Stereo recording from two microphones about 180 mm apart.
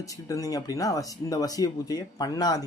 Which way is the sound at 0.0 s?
20° left (ahead or behind).